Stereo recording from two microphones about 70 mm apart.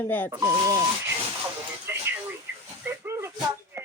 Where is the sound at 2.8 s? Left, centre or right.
Right.